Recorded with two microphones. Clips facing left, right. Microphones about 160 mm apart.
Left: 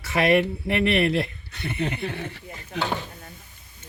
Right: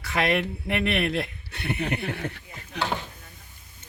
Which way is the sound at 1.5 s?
65° right (ahead or behind).